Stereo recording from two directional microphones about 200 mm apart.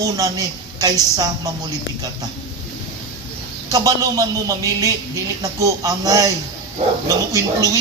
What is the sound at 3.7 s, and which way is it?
A man's voice, 15° right (ahead or behind).